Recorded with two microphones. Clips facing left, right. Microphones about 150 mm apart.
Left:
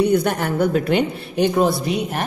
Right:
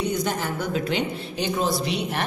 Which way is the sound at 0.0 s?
60° left (ahead or behind).